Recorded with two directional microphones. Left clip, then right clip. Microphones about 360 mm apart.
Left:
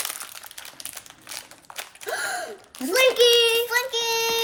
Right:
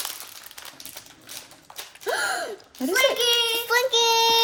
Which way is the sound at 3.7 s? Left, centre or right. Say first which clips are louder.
Right 4 dB; centre.